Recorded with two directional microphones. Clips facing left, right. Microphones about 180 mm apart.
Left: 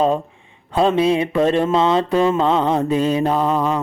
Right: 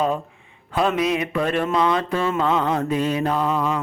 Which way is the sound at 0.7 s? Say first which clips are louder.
Left 5 dB; 25° left (ahead or behind).